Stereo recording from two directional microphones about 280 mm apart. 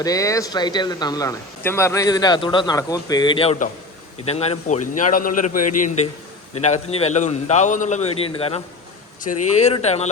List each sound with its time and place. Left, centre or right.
0.0 s a man's voice: centre